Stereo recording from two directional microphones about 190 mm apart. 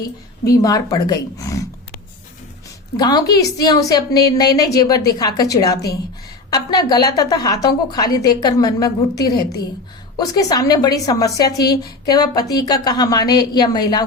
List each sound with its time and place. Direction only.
0.0 s a woman's voice: 20° left (ahead or behind)
3.0 s a woman's voice: 20° left (ahead or behind)